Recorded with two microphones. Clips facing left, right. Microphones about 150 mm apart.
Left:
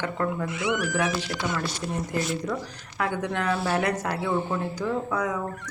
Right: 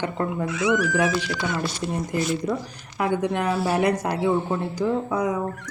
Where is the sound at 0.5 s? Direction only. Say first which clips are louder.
Right 5 dB; 90° right.